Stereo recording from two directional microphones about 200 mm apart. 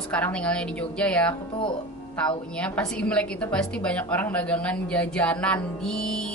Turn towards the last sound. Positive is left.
turn(degrees=5)  # may be behind; listen again after turning